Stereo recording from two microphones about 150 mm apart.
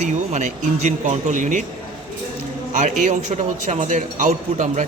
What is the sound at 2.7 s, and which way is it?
A man's voice, 55° right (ahead or behind).